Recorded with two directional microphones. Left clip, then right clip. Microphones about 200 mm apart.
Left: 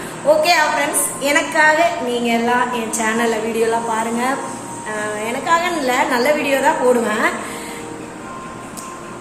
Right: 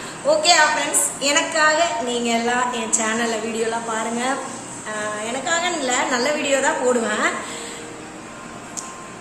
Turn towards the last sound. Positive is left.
turn(degrees=-15)  # may be behind; listen again after turning